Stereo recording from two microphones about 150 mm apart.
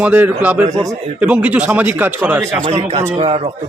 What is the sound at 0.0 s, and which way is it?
Speech, 10° right (ahead or behind).